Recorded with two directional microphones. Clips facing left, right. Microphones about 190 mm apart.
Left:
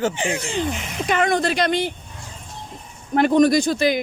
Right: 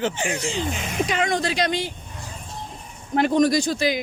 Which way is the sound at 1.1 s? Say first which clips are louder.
Left 7 dB; 55° left (ahead or behind).